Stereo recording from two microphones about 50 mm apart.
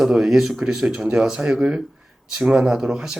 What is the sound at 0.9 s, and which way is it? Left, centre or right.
Speech, right.